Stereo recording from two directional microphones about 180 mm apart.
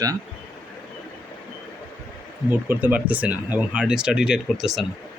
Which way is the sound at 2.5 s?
10° right (ahead or behind).